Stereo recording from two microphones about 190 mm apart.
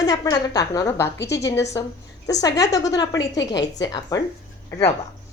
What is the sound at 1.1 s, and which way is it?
Speech, 65° left (ahead or behind).